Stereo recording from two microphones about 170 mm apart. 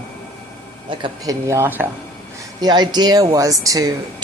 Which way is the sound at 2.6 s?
25° right (ahead or behind).